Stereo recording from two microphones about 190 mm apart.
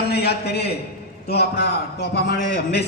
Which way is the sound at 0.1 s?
55° left (ahead or behind).